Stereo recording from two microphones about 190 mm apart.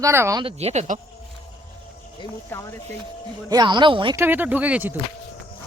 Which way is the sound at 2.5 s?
15° left (ahead or behind).